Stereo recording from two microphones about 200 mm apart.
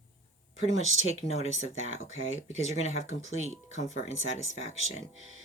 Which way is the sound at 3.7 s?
35° left (ahead or behind).